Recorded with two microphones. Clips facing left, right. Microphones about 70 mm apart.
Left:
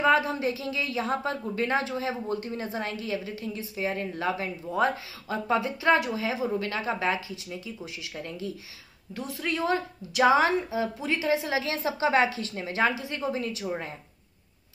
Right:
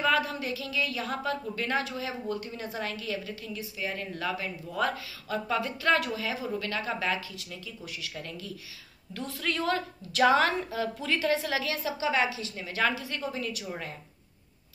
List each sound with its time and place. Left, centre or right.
0.0 s a woman's voice: left